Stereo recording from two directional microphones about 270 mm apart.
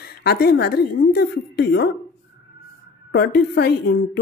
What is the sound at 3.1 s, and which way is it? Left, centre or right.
A woman's voice, left.